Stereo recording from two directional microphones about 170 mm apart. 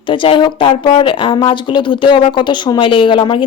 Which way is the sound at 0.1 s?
30° left (ahead or behind).